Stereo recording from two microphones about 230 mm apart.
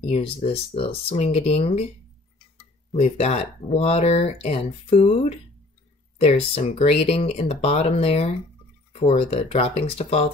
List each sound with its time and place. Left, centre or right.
0.0 s speech: left
2.9 s speech: left